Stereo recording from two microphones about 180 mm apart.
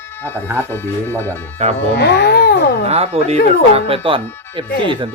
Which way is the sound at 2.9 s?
35° right (ahead or behind).